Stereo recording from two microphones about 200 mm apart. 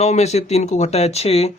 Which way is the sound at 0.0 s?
35° left (ahead or behind).